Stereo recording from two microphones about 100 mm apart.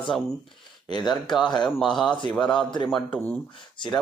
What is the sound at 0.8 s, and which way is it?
Speech, 45° left (ahead or behind).